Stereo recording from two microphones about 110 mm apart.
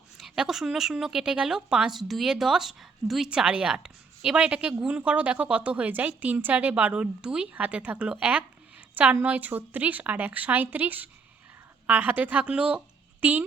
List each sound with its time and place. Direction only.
0.2 s a woman's voice: 5° right (ahead or behind)